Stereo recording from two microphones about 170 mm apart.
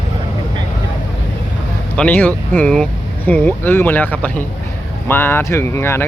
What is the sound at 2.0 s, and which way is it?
Speech, 10° left (ahead or behind).